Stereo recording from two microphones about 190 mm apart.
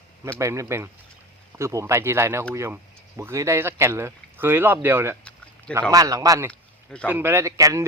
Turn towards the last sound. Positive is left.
turn(degrees=-15)  # may be behind; listen again after turning